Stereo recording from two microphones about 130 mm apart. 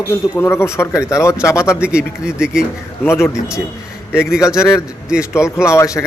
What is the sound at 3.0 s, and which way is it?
Speech, 20° left (ahead or behind).